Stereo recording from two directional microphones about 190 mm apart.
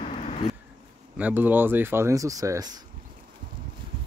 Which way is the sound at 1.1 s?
10° right (ahead or behind).